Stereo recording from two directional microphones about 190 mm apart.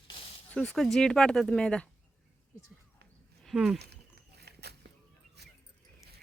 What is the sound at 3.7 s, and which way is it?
Walk, 60° right (ahead or behind).